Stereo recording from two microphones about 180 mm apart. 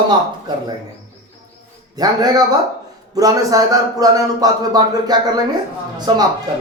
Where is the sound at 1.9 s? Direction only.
20° right (ahead or behind).